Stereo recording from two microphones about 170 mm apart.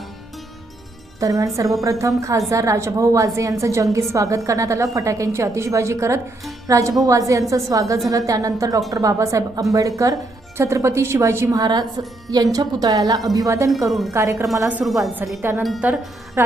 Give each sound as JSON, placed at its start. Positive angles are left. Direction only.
{"t": 1.2, "sound": "a woman's voice", "side_deg": -20}
{"t": 15.6, "sound": "speech", "side_deg": 0}